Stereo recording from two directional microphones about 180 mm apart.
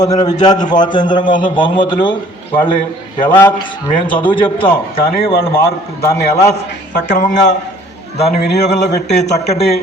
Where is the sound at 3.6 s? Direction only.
25° left (ahead or behind).